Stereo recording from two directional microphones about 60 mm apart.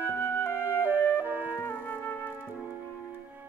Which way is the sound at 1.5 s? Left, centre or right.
Left.